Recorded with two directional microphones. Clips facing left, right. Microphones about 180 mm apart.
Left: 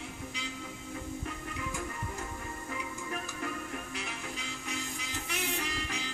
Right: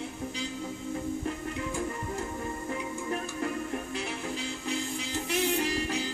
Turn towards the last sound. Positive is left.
turn(degrees=-35)  # may be behind; listen again after turning